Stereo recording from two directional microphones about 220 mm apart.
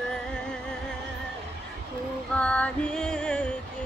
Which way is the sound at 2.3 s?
5° left (ahead or behind).